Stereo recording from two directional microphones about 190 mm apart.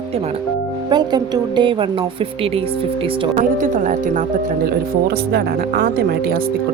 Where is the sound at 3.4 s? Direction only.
40° right (ahead or behind).